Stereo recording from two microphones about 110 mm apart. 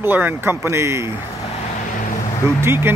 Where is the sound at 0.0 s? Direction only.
20° right (ahead or behind).